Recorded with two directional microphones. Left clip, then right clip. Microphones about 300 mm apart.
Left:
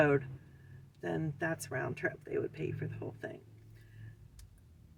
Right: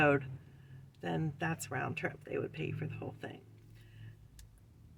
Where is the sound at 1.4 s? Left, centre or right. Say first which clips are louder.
Left 1 dB; centre.